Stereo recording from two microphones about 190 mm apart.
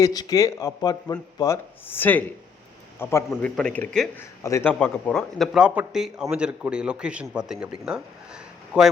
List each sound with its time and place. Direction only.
0.0 s a man's voice: 20° left (ahead or behind)
3.2 s speech: centre (ahead or behind)
4.4 s a man's voice: 15° left (ahead or behind); by 8.9 s 5° right (ahead or behind)